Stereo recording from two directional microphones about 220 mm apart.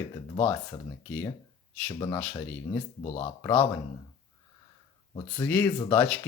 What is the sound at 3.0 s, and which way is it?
Speech, 25° left (ahead or behind).